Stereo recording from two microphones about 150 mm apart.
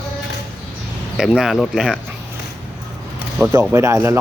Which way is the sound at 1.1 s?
5° right (ahead or behind).